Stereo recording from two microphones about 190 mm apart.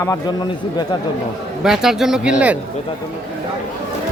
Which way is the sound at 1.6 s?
Centre (ahead or behind).